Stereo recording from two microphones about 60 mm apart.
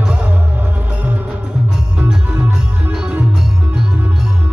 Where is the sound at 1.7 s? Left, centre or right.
Centre.